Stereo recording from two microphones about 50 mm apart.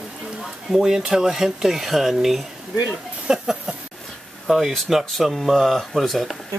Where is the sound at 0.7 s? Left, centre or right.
Centre.